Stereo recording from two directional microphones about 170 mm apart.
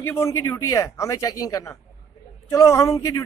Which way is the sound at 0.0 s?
15° left (ahead or behind).